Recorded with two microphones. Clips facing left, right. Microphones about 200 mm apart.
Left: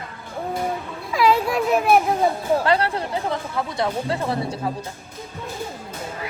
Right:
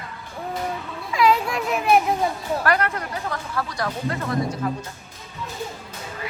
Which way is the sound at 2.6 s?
30° left (ahead or behind).